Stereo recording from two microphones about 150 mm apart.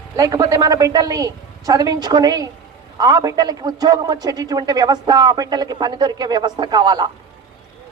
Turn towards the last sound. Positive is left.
turn(degrees=-30)  # may be behind; listen again after turning